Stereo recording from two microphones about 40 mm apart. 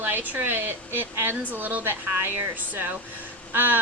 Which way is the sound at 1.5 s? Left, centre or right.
Right.